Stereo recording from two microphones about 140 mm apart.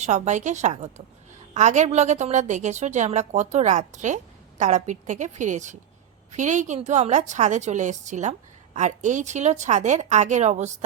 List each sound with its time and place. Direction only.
0.0 s a woman's voice: 55° right (ahead or behind)